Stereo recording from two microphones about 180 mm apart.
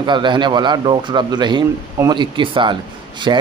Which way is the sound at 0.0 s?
25° right (ahead or behind).